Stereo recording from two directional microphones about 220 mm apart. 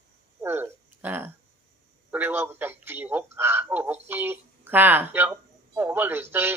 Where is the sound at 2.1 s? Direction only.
10° right (ahead or behind).